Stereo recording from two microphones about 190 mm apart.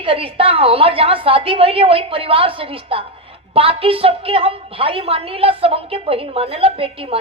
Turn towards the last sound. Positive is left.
turn(degrees=-30)  # may be behind; listen again after turning